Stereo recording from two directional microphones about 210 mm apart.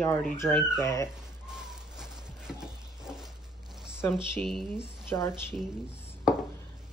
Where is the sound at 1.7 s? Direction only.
5° right (ahead or behind).